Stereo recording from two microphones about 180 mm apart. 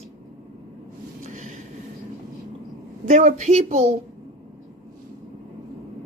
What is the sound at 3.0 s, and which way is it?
Speech, 40° right (ahead or behind).